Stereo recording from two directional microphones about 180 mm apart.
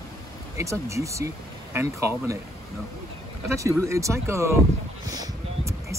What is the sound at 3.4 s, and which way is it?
Speech, 15° right (ahead or behind).